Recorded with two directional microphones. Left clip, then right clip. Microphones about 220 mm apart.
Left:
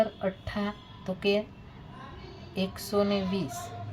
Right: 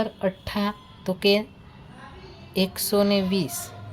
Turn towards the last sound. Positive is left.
turn(degrees=-55)  # may be behind; listen again after turning